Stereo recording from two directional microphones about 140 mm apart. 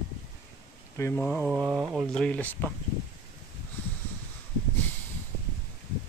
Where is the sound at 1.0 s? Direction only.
20° left (ahead or behind).